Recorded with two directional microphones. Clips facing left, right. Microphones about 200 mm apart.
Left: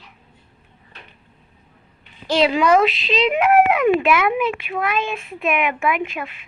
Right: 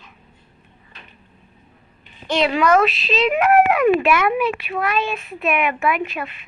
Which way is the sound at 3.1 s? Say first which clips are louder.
Even; 15° left (ahead or behind).